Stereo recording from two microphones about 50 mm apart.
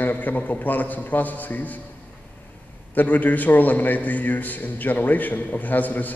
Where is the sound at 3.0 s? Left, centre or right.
Left.